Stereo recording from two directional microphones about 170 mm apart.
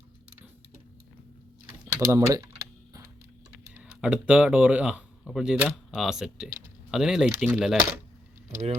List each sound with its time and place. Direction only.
1.8 s speech: 15° right (ahead or behind)
4.0 s speech: 5° right (ahead or behind)
8.4 s speech: 40° right (ahead or behind)